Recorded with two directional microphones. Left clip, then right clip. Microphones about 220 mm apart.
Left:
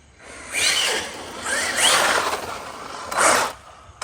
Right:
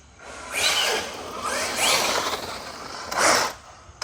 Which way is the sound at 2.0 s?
50° left (ahead or behind).